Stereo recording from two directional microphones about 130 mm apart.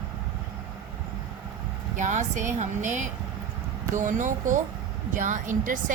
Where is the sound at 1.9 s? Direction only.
70° right (ahead or behind).